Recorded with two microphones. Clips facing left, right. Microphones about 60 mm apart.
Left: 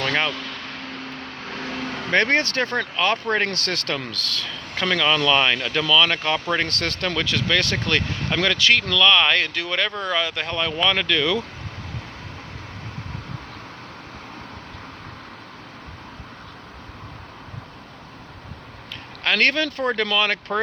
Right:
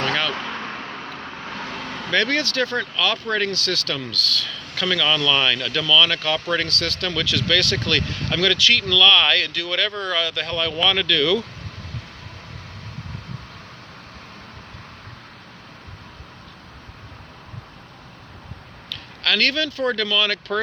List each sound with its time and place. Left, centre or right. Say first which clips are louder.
0.1 s vehicle: left 1 dB; left
0.3 s vehicle: right 4 dB; right; by 1.6 s centre
1.6 s vehicle: left 5 dB; centre
2.0 s speech: left 2 dB; left
18.9 s speech: even; left